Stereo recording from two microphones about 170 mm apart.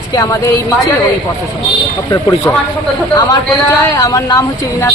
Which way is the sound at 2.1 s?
20° left (ahead or behind).